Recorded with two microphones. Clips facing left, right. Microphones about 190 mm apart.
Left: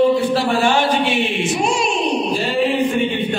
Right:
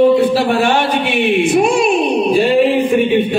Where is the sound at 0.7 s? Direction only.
55° right (ahead or behind).